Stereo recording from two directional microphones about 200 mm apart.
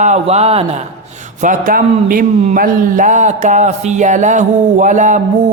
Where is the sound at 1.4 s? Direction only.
40° right (ahead or behind).